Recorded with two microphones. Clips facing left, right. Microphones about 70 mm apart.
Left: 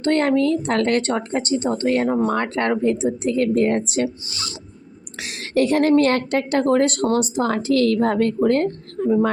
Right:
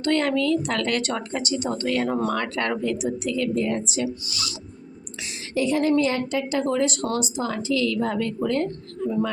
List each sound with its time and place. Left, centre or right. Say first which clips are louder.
0.0 s speech: left 4 dB; left
4.3 s speech: left 1 dB; left
5.2 s a woman's voice: left 5 dB; left